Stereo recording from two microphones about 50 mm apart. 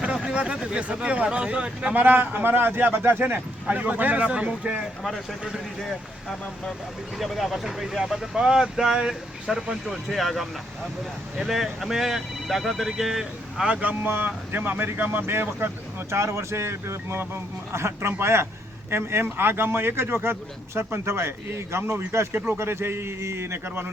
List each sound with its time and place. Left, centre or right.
0.0 s speech: right
2.0 s speech: right
3.3 s speech: right
7.2 s speech: centre
9.8 s speech: centre
13.8 s speech: right
15.3 s speech: right
22.3 s speech: right
22.5 s speech: right